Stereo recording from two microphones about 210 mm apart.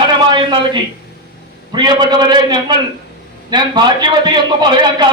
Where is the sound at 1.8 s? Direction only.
20° right (ahead or behind).